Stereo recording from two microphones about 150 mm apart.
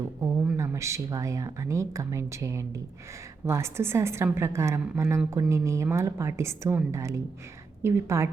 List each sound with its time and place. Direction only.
0.2 s a woman's voice: 20° right (ahead or behind)